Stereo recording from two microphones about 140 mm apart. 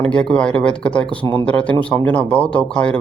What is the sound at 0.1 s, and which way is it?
Speech, 5° left (ahead or behind).